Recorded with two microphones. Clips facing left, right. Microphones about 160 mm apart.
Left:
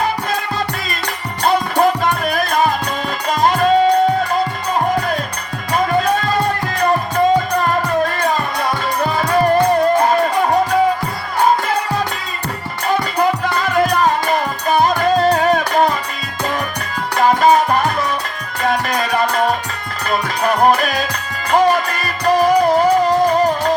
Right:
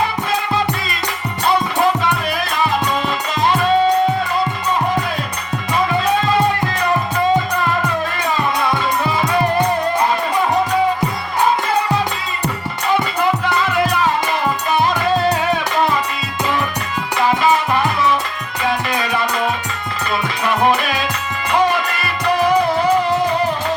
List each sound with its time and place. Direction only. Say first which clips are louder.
1.5 s music: left 2 dB; 45° left (ahead or behind)
5.7 s music: left 1 dB; 45° left (ahead or behind)
7.6 s music: left 3 dB; 45° left (ahead or behind)
13.9 s music: left 2 dB; 45° left (ahead or behind)
17.2 s music: left 4 dB; 45° left (ahead or behind)